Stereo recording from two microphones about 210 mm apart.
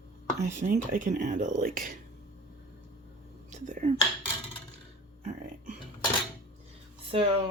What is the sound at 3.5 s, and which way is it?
Speech, 35° right (ahead or behind).